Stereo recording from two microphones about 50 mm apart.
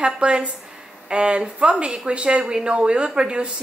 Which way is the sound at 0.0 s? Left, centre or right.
Centre.